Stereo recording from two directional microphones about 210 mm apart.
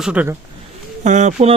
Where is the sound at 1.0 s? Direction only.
35° right (ahead or behind).